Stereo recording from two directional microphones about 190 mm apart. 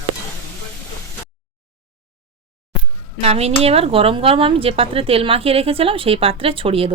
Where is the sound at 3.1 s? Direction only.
35° right (ahead or behind).